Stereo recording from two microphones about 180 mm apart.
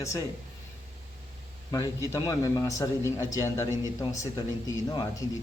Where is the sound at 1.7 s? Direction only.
20° left (ahead or behind).